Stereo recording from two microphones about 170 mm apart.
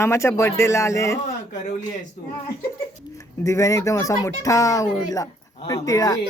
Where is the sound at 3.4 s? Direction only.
20° left (ahead or behind).